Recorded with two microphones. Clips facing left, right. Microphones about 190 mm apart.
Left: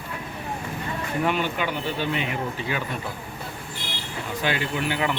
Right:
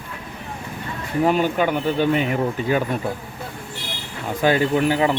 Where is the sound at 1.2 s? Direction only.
40° right (ahead or behind).